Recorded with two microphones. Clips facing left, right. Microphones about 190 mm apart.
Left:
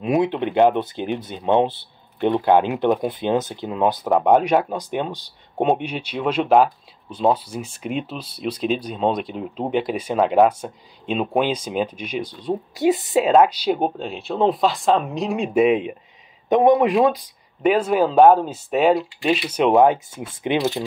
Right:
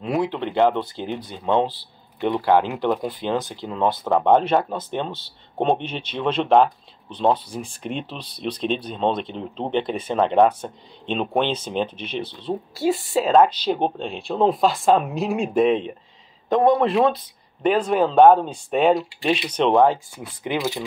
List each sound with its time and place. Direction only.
0.0 s speech: 20° left (ahead or behind)
19.8 s speech: 20° left (ahead or behind)